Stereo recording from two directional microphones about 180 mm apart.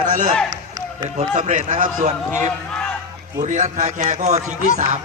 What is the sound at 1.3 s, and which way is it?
A man's voice, 45° right (ahead or behind).